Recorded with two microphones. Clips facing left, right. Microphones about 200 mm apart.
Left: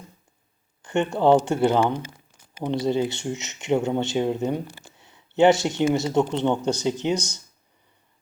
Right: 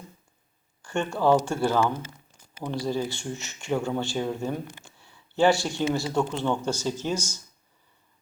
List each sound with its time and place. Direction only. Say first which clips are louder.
0.8 s speech: left 4 dB; 20° left (ahead or behind)
4.8 s a sound: left 3 dB; 20° left (ahead or behind)
5.9 s speech: left 4 dB; 20° left (ahead or behind)